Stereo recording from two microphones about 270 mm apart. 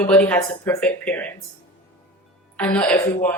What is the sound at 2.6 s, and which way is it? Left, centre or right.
Speech, centre.